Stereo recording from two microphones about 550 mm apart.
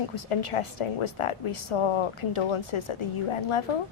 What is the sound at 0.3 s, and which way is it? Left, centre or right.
A woman's voice, left.